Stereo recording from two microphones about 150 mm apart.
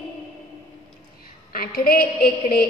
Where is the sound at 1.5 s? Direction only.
80° left.